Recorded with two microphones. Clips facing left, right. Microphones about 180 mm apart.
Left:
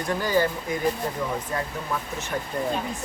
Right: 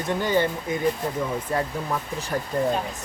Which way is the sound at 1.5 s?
30° right (ahead or behind).